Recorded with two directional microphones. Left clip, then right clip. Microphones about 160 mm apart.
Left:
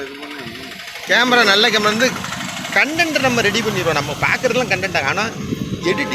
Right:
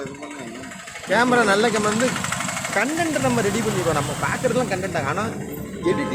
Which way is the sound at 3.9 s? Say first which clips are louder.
Left 5 dB; 20° left (ahead or behind).